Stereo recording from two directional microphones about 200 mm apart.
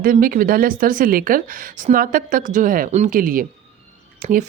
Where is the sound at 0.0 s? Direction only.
45° right (ahead or behind).